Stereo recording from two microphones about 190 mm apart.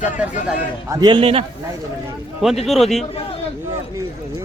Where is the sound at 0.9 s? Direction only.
20° right (ahead or behind).